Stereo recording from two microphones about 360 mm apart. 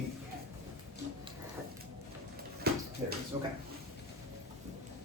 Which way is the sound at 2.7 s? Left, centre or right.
Right.